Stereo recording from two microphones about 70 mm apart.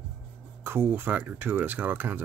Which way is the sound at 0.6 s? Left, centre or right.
Right.